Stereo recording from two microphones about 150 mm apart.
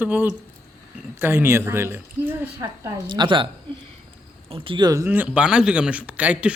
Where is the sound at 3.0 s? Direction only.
30° right (ahead or behind).